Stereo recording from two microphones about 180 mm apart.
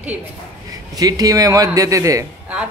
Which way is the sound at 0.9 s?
20° right (ahead or behind).